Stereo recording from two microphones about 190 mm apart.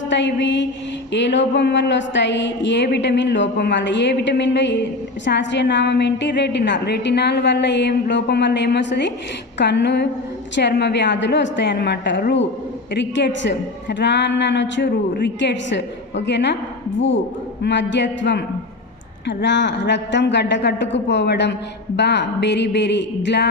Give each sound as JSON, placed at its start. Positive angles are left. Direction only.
{"t": 0.1, "sound": "a woman's voice", "side_deg": 70}
{"t": 17.6, "sound": "a woman's voice", "side_deg": 65}